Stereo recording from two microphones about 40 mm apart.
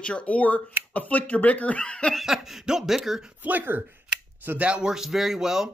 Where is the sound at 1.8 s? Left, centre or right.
Left.